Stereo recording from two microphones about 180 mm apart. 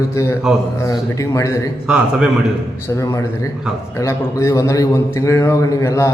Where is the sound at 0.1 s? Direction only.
15° left (ahead or behind).